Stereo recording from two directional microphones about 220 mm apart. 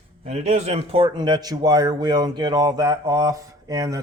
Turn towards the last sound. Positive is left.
turn(degrees=-15)  # may be behind; listen again after turning